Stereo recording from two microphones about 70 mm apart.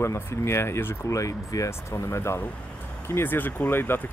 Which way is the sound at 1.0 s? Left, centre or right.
Left.